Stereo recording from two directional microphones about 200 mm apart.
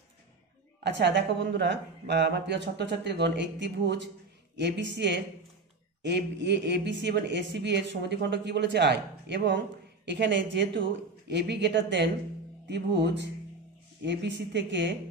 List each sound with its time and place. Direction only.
0.8 s speech: 60° right (ahead or behind)